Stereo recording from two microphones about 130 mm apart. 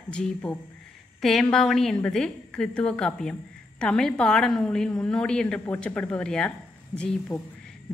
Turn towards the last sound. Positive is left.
turn(degrees=25)  # may be behind; listen again after turning